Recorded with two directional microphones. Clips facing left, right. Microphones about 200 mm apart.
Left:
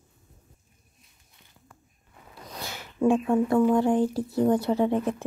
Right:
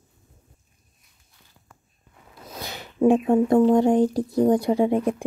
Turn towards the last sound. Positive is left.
turn(degrees=-15)  # may be behind; listen again after turning